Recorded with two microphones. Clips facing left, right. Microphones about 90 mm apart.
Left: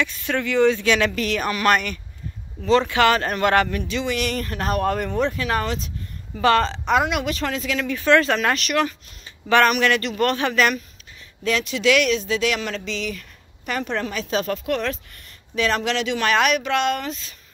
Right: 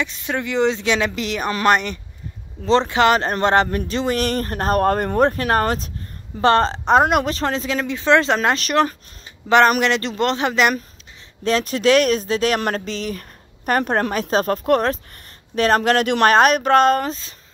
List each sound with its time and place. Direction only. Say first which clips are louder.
0.0 s a woman's voice: even; 20° right (ahead or behind)
3.7 s speech: right 4 dB; 40° right (ahead or behind)
6.3 s a woman's voice: right 2 dB; 30° right (ahead or behind)
9.8 s speech: right 1 dB; 25° right (ahead or behind)
11.4 s speech: right 3 dB; 40° right (ahead or behind)